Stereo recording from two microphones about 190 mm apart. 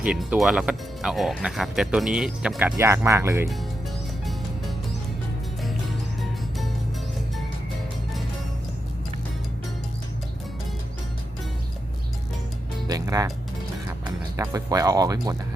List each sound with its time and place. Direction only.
0.0 s speech: 5° right (ahead or behind)
12.9 s music: 20° right (ahead or behind)
14.0 s speech: 15° right (ahead or behind)